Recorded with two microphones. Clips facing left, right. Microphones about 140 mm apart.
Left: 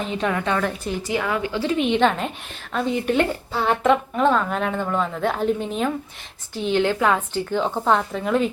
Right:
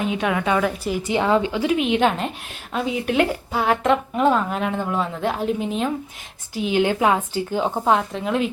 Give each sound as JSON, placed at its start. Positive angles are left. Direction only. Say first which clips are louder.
{"t": 0.0, "sound": "a woman's voice", "louder": "right 2 dB", "side_deg": -5}
{"t": 1.0, "sound": "a woman's voice", "louder": "right 6 dB", "side_deg": -25}
{"t": 1.7, "sound": "a woman's voice", "louder": "left 1 dB", "side_deg": -5}
{"t": 6.7, "sound": "a woman's voice", "louder": "right 1 dB", "side_deg": -15}